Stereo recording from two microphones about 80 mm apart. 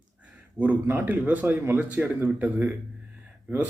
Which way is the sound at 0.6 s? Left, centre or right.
Centre.